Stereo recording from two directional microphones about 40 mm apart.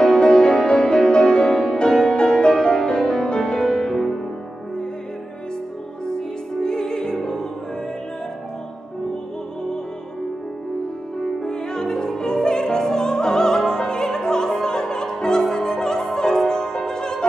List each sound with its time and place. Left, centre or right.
0.0 s music: centre
6.0 s music: centre
11.4 s opera: centre
15.5 s music: centre